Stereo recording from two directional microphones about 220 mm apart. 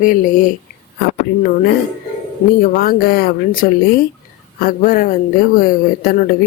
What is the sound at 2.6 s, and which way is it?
A man's voice, 40° left (ahead or behind).